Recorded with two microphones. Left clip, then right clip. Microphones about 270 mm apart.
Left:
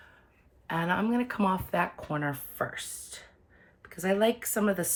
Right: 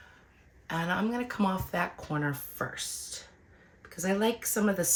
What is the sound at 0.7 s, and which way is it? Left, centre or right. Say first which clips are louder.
Speech: left 2 dB; left.